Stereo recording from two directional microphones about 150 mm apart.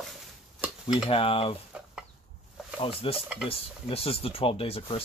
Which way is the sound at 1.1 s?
40° left (ahead or behind).